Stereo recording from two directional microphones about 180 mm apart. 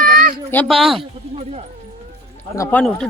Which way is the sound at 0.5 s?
5° left (ahead or behind).